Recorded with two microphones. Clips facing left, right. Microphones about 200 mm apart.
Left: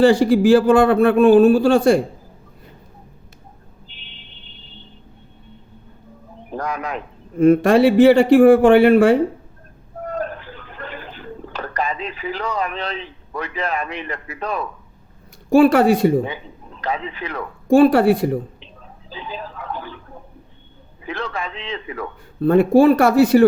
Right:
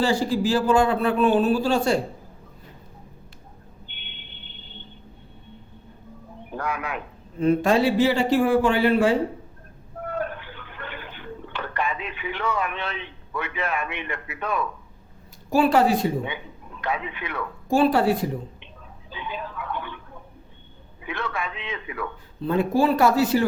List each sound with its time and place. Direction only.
0.0 s speech: 55° left (ahead or behind)
3.8 s a sound: 35° left (ahead or behind)
6.5 s a man's voice: 40° left (ahead or behind)
7.3 s speech: 50° left (ahead or behind)
10.1 s a sound: 35° left (ahead or behind)
15.5 s speech: 55° left (ahead or behind)
16.8 s a man's voice: 35° left (ahead or behind)
17.7 s speech: 55° left (ahead or behind)
19.1 s a man's voice: 35° left (ahead or behind)
21.0 s a man's voice: 35° left (ahead or behind)
22.4 s speech: 60° left (ahead or behind)